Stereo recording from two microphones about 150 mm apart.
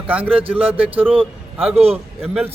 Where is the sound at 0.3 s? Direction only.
40° right (ahead or behind).